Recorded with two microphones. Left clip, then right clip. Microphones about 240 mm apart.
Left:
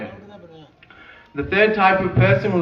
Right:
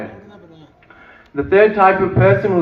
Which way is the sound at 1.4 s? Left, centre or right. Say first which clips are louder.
Right 5 dB; right.